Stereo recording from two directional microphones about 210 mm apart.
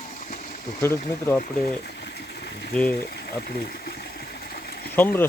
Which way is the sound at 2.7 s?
5° left (ahead or behind).